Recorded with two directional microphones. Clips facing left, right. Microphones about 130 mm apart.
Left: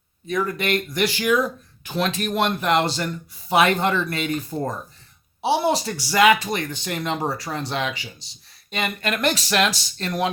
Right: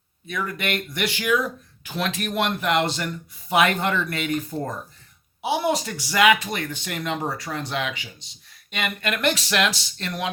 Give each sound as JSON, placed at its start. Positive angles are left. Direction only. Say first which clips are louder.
{"t": 0.3, "sound": "speech", "louder": "left 5 dB", "side_deg": 35}